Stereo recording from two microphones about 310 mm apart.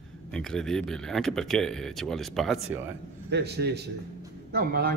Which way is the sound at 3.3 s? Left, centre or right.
Right.